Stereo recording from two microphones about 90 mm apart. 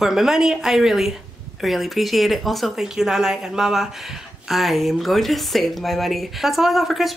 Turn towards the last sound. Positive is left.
turn(degrees=0)  # may be behind; listen again after turning